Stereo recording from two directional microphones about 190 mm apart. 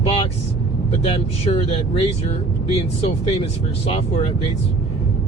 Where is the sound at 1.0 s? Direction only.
30° left (ahead or behind).